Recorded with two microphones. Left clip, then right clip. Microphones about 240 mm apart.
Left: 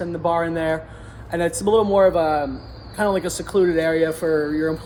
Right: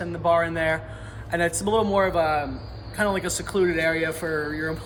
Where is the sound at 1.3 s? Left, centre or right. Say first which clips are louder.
Left 4 dB; centre.